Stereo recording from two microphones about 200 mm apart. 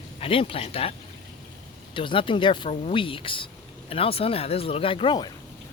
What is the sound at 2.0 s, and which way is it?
Speech, 25° left (ahead or behind).